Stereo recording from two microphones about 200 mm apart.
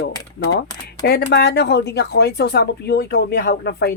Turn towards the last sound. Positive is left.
turn(degrees=55)  # may be behind; listen again after turning